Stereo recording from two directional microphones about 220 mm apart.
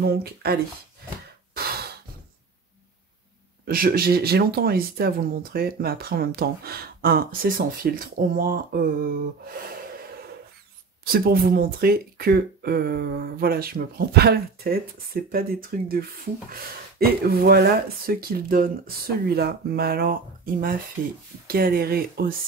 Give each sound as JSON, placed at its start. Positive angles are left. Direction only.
{"t": 0.1, "sound": "speech", "side_deg": -45}
{"t": 3.6, "sound": "speech", "side_deg": -40}
{"t": 8.4, "sound": "a sound", "side_deg": -40}
{"t": 11.1, "sound": "speech", "side_deg": -45}
{"t": 21.5, "sound": "speech", "side_deg": -45}